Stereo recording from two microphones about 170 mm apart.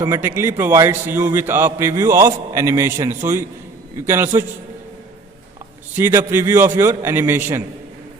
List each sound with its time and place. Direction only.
0.0 s a man's voice: 15° right (ahead or behind)
6.0 s a man's voice: 15° right (ahead or behind)